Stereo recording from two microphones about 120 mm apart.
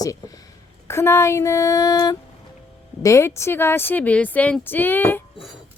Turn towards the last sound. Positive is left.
turn(degrees=15)  # may be behind; listen again after turning